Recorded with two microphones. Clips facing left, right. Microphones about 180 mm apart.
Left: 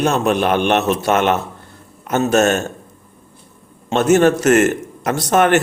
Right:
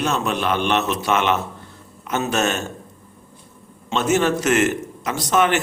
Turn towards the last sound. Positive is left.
turn(degrees=50)  # may be behind; listen again after turning